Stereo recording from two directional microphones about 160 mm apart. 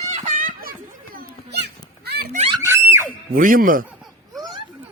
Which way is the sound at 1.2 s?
90° right.